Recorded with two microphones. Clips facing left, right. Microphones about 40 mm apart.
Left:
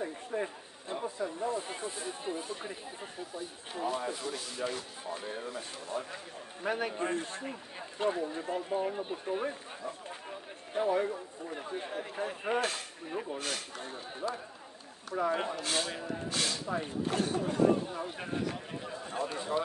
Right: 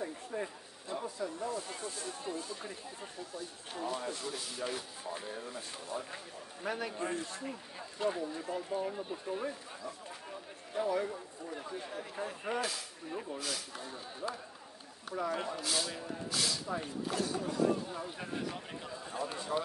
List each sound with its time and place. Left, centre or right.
0.0 s speech: left
3.9 s rub: centre
5.2 s speech: left
8.1 s speech: left
13.1 s speech: left
13.4 s speech: left
15.1 s speech: left
15.6 s speech: left
16.6 s speech: left
17.0 s speech: left
18.5 s speech: left
19.5 s speech: left